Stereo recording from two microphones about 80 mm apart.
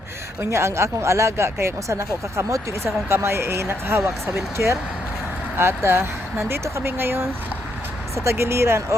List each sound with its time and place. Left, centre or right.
0.5 s speech: right